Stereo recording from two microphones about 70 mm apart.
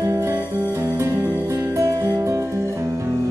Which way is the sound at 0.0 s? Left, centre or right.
Right.